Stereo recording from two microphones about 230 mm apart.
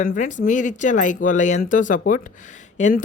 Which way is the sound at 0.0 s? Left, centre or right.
Left.